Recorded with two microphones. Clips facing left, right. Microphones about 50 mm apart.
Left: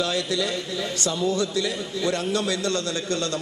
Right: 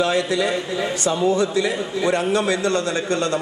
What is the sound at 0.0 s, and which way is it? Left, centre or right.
A man's voice, right.